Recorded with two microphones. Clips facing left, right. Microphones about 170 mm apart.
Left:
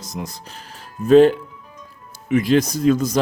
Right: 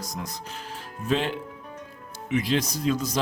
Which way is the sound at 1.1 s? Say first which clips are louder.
Left 15 dB; 45° left (ahead or behind).